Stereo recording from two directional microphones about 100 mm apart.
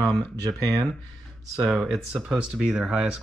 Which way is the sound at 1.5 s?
5° right (ahead or behind).